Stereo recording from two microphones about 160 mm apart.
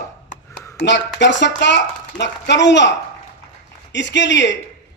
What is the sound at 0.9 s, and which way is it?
A man's voice, 90° left.